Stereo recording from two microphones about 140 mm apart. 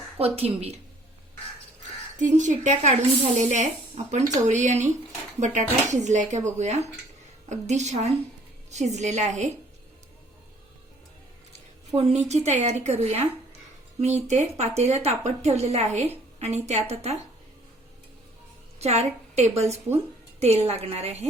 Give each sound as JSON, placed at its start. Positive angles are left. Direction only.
{"t": 0.3, "sound": "a woman's voice", "side_deg": -45}
{"t": 2.1, "sound": "speech", "side_deg": -60}
{"t": 11.9, "sound": "a woman's voice", "side_deg": -50}
{"t": 18.8, "sound": "a woman's voice", "side_deg": -50}